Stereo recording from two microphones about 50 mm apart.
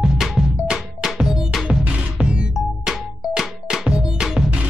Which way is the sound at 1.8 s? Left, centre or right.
Right.